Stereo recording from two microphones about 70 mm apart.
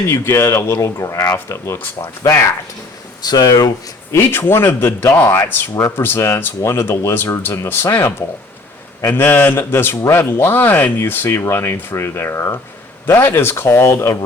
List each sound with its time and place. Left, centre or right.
0.1 s speech: left
3.2 s speech: left
4.1 s speech: left
9.0 s a man's voice: left
9.6 s speech: left